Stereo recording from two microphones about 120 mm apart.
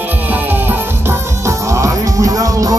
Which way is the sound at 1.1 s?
25° right (ahead or behind).